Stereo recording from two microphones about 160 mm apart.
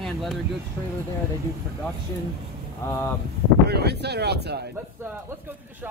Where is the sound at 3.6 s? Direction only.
90° right.